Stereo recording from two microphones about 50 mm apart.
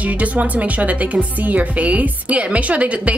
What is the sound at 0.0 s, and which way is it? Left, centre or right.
Speech, right.